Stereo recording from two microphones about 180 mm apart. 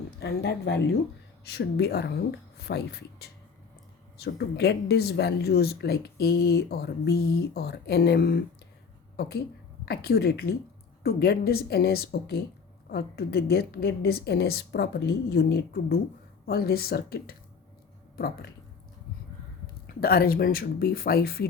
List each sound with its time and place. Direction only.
0.2 s a woman's voice: 65° left (ahead or behind)
9.8 s speech: 60° left (ahead or behind)
19.9 s speech: 60° left (ahead or behind)